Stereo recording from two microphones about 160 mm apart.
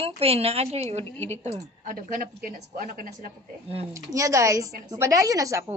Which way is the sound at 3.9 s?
20° right (ahead or behind).